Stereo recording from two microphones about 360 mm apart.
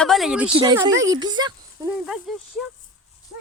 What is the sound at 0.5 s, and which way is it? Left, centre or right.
Speech, centre.